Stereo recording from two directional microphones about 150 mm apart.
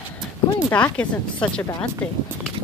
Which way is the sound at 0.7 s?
10° left (ahead or behind).